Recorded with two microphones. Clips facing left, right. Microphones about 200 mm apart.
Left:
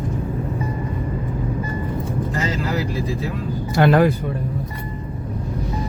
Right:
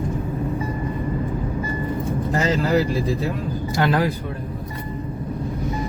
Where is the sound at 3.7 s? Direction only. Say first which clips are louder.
Left 6 dB; 55° left (ahead or behind).